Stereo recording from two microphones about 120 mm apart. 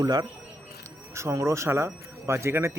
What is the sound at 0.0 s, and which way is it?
Speech, 35° right (ahead or behind).